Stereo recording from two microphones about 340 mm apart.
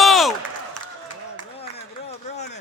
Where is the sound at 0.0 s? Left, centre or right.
Centre.